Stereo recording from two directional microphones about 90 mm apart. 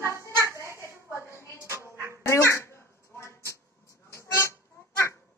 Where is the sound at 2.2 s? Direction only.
30° left (ahead or behind).